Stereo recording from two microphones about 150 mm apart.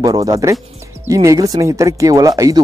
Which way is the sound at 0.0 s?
20° right (ahead or behind).